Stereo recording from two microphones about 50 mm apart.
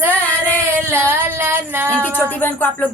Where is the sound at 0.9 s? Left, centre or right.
Right.